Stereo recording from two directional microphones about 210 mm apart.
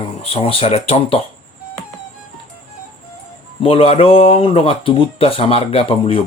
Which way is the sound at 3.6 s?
25° left (ahead or behind).